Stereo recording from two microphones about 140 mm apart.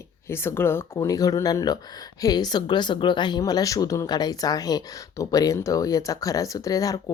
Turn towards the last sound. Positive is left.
turn(degrees=25)  # may be behind; listen again after turning